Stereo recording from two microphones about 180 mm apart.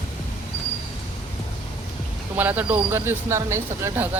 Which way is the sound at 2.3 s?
10° right (ahead or behind).